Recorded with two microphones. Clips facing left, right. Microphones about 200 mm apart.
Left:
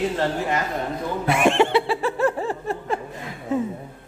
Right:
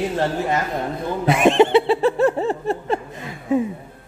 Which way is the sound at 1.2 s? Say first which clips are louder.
Right 4 dB; 20° right (ahead or behind).